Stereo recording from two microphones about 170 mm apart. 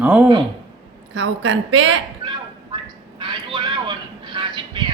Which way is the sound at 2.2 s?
25° right (ahead or behind).